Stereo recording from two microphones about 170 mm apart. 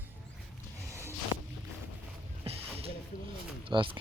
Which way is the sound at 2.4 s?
35° right (ahead or behind).